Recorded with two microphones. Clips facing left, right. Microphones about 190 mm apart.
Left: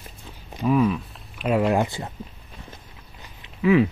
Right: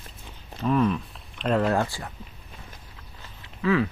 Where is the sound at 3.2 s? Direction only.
15° left (ahead or behind).